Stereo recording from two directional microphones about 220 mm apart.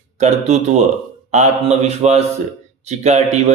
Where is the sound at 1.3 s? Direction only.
30° right (ahead or behind).